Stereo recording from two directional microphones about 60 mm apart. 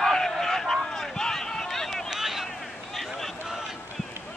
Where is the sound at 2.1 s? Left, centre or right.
Centre.